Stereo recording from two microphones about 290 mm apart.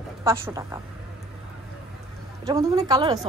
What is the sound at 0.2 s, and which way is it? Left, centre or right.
Speech, centre.